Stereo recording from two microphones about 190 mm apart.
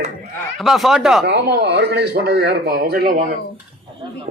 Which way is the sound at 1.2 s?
60° right (ahead or behind).